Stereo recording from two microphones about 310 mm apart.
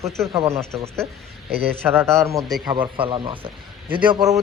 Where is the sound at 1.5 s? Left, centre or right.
Right.